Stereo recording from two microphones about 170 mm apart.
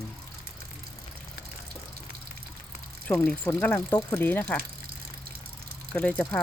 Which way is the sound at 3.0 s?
10° left (ahead or behind).